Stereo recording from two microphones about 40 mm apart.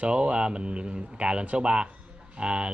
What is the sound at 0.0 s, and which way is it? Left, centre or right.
Speech, right.